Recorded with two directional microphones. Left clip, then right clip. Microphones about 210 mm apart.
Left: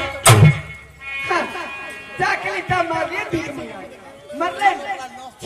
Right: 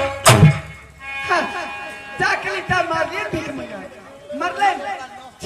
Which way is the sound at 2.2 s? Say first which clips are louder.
Right 1 dB; 50° right (ahead or behind).